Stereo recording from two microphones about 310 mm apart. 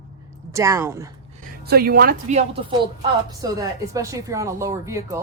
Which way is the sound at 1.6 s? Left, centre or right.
Right.